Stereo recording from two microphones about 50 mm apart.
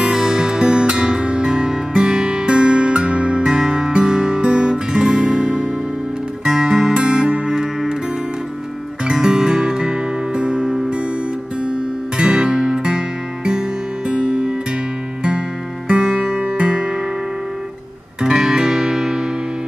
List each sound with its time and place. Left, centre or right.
0.0 s music: centre
9.0 s music: centre
12.2 s music: centre
15.9 s music: right
18.2 s music: centre